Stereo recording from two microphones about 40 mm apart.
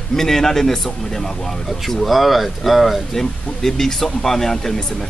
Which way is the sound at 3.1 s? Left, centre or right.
Centre.